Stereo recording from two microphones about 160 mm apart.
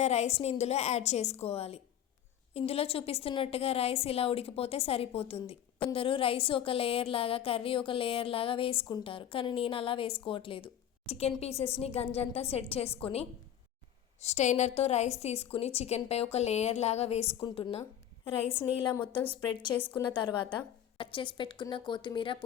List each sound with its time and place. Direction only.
0.0 s a woman's voice: 45° left (ahead or behind)
18.5 s a woman's voice: 15° left (ahead or behind)
21.0 s a woman's voice: 30° left (ahead or behind)